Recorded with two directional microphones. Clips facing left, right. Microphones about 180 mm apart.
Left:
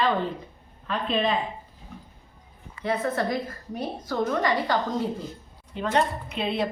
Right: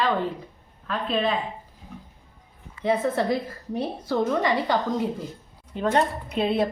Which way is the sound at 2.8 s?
20° right (ahead or behind).